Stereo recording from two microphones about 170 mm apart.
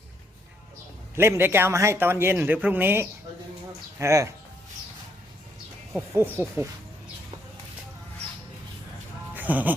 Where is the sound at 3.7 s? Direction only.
20° right (ahead or behind).